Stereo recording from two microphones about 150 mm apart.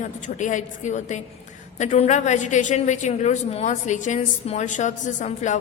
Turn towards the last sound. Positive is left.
turn(degrees=55)  # may be behind; listen again after turning